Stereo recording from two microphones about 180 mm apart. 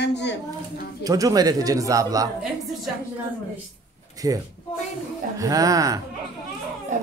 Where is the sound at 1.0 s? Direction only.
20° right (ahead or behind).